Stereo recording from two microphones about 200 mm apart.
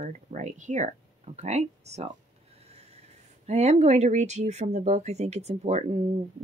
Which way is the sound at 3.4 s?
35° right (ahead or behind).